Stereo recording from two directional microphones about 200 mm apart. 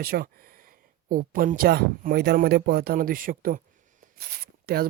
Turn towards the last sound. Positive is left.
turn(degrees=-50)  # may be behind; listen again after turning